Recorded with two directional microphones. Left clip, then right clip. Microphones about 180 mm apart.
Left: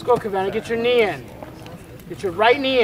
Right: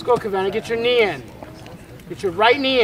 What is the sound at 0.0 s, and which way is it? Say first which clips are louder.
Speech: even; 35° right (ahead or behind).